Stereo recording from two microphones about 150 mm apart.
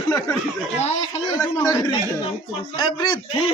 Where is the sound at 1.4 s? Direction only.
25° left (ahead or behind).